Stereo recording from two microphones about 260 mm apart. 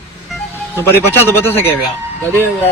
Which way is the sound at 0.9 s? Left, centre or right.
Centre.